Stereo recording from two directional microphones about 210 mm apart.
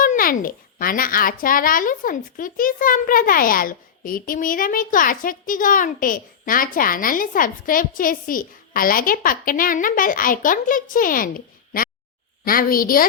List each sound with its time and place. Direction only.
0.0 s a child's voice: 40° left (ahead or behind)